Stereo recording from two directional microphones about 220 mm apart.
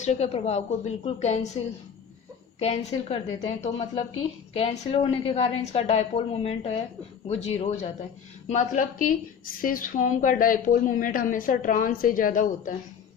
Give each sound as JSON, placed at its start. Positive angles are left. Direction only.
{"t": 0.0, "sound": "a woman's voice", "side_deg": 30}
{"t": 2.6, "sound": "a woman's voice", "side_deg": 30}